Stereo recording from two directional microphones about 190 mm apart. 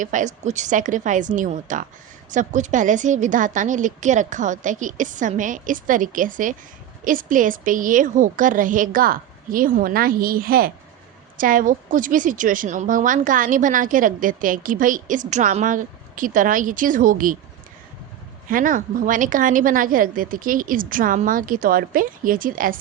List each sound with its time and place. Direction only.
0.0 s a woman's voice: 40° right (ahead or behind)
18.4 s a woman's voice: 45° right (ahead or behind)